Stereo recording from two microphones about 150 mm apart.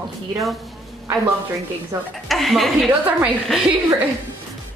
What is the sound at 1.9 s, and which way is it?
Speech, 20° right (ahead or behind).